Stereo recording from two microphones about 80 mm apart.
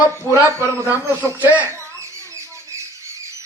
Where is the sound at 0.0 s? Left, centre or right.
Right.